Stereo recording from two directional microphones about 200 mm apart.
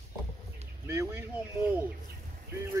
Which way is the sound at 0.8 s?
10° right (ahead or behind).